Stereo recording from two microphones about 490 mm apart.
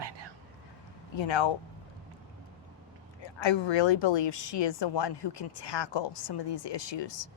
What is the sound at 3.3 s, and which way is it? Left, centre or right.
A woman's voice, left.